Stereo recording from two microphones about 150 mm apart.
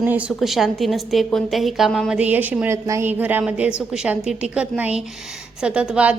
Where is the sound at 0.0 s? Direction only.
10° right (ahead or behind).